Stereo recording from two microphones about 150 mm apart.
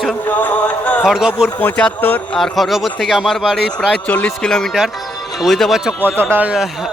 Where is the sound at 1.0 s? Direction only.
5° right (ahead or behind).